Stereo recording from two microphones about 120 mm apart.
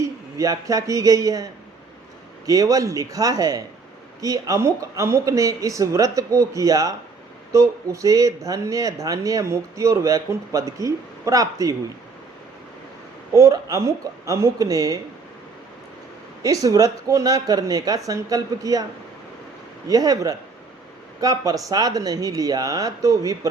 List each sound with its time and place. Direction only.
0.3 s speech: 30° right (ahead or behind)
2.5 s speech: 30° right (ahead or behind)
13.3 s speech: 25° right (ahead or behind)
16.4 s speech: 30° right (ahead or behind)
19.9 s speech: 30° right (ahead or behind)